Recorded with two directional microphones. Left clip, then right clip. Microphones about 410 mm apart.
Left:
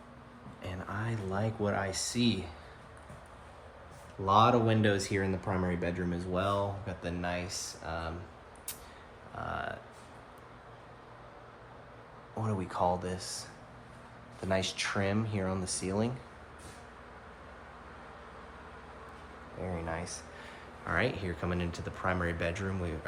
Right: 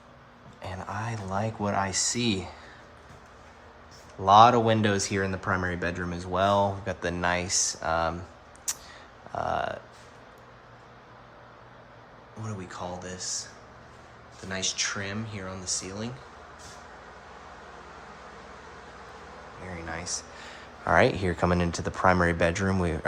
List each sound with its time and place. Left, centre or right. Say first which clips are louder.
0.9 s speech: right 4 dB; centre
1.3 s speech: right 4 dB; right
1.7 s speech: right 6 dB; centre
4.3 s speech: right 8 dB; right
5.1 s speech: right 5 dB; right
6.1 s speech: right 9 dB; right
8.7 s a sound: right 13 dB; centre
9.4 s speech: right 8 dB; centre
12.4 s speech: left 6 dB; centre
14.5 s speech: right 2 dB; centre
19.9 s speech: right 4 dB; centre